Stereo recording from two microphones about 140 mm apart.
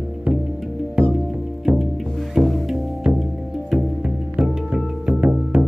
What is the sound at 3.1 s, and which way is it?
Music, 10° right (ahead or behind).